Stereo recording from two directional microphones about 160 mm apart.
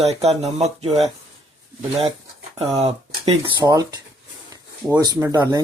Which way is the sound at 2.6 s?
40° right (ahead or behind).